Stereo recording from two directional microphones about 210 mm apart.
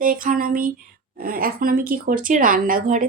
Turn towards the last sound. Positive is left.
turn(degrees=-40)  # may be behind; listen again after turning